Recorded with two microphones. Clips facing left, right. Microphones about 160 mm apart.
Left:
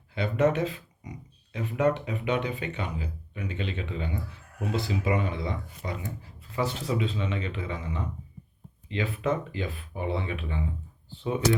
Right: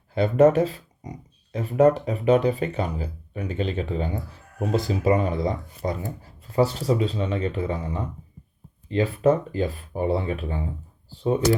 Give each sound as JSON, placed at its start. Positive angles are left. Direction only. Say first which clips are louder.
{"t": 0.1, "sound": "speech", "louder": "right 8 dB", "side_deg": -40}